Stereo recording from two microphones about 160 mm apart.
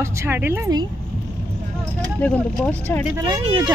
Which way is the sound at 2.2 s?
10° left (ahead or behind).